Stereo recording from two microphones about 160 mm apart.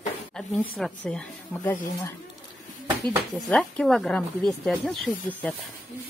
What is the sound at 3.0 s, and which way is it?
Speech, 5° left (ahead or behind).